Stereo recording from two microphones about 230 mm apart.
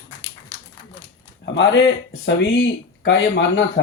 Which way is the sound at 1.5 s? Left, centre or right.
Left.